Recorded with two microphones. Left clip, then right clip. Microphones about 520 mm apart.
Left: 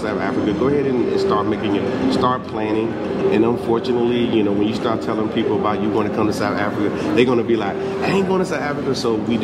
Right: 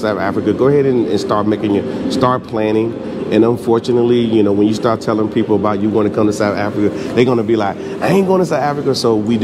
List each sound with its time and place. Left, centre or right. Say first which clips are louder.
0.7 s speech: right 7 dB; right
5.7 s speech: right 4 dB; right